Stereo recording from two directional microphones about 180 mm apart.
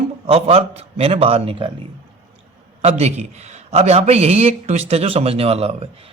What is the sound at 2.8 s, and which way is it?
A man's voice, 35° right (ahead or behind).